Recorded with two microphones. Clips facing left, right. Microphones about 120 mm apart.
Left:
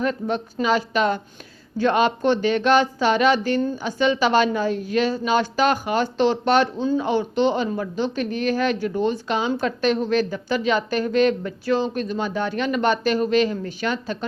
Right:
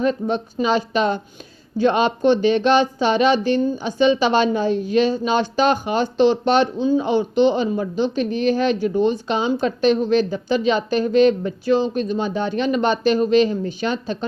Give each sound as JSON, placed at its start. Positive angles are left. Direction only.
{"t": 0.0, "sound": "a woman's voice", "side_deg": -20}